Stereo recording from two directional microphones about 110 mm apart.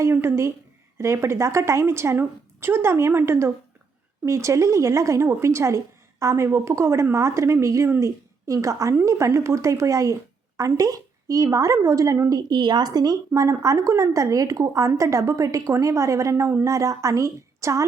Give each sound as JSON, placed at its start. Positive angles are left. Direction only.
{"t": 0.0, "sound": "speech", "side_deg": -25}
{"t": 12.5, "sound": "speech", "side_deg": -40}